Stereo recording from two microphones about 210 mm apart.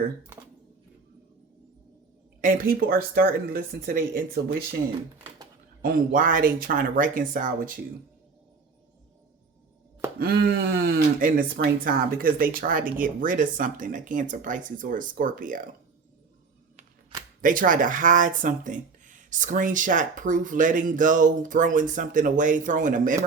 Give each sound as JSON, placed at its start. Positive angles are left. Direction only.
{"t": 2.4, "sound": "speech", "side_deg": -40}
{"t": 5.8, "sound": "speech", "side_deg": -40}
{"t": 10.2, "sound": "speech", "side_deg": -45}
{"t": 17.4, "sound": "speech", "side_deg": -40}